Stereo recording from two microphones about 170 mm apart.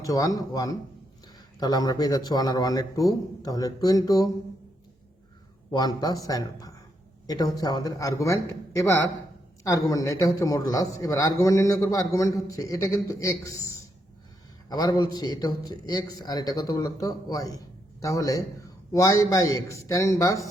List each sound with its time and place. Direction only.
0.0 s a man's voice: 20° left (ahead or behind)
5.7 s a man's voice: 25° left (ahead or behind)